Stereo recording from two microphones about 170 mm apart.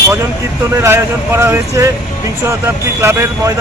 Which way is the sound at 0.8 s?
15° right (ahead or behind).